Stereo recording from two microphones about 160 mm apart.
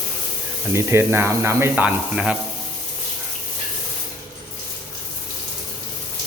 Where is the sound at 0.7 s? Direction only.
15° right (ahead or behind).